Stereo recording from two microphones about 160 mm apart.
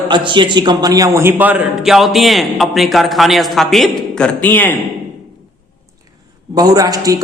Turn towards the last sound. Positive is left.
turn(degrees=-20)  # may be behind; listen again after turning